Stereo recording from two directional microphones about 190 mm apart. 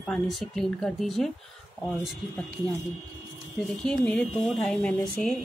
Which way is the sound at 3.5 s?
5° left (ahead or behind).